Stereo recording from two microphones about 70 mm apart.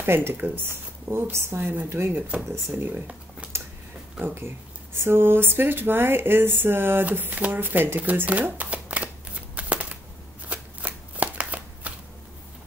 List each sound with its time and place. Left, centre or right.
0.0 s speech: right
5.0 s speech: right; by 9.9 s centre
10.5 s shuffling cards: right